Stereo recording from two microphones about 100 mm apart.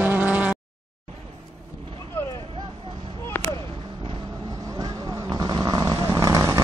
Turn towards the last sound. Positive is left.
turn(degrees=-35)  # may be behind; listen again after turning